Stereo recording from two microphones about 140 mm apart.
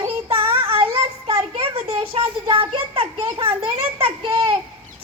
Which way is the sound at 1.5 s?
45° right (ahead or behind).